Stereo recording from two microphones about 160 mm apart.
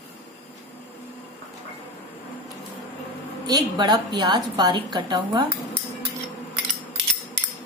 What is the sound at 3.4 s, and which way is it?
A woman's voice, 25° right (ahead or behind).